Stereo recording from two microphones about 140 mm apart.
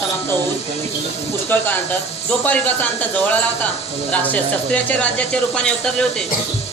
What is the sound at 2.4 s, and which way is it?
Speech, 10° left (ahead or behind).